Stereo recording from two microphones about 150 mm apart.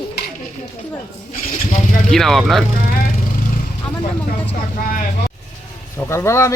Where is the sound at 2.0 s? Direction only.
Centre (ahead or behind).